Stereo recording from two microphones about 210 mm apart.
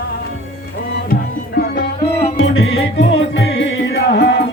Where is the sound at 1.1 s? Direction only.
45° left (ahead or behind).